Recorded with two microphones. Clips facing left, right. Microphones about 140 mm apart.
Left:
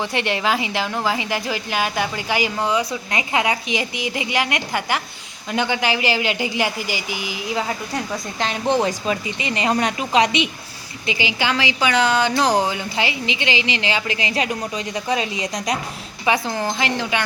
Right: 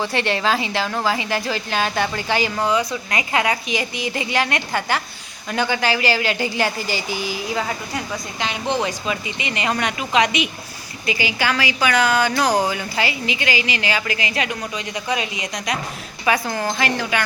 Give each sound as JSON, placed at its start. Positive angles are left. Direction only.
{"t": 0.0, "sound": "a woman's voice", "side_deg": 15}
{"t": 8.8, "sound": "a woman's voice", "side_deg": 35}
{"t": 16.2, "sound": "a woman's voice", "side_deg": 20}